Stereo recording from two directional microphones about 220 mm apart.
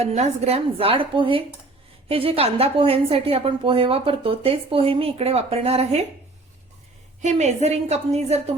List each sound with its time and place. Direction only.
0.0 s a woman's voice: 30° right (ahead or behind)
7.2 s a woman's voice: 30° right (ahead or behind)